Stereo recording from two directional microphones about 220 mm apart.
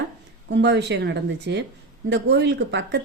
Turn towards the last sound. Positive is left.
turn(degrees=-55)  # may be behind; listen again after turning